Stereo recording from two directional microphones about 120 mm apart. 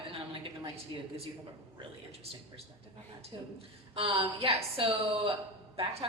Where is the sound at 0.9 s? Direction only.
40° right (ahead or behind).